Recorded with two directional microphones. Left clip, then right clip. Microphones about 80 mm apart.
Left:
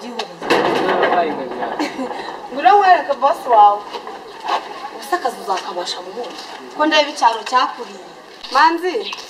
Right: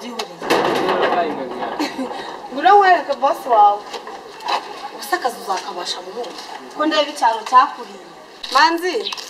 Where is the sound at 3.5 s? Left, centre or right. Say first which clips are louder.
Left 2 dB; right.